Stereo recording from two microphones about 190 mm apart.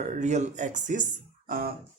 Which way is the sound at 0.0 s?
35° right (ahead or behind).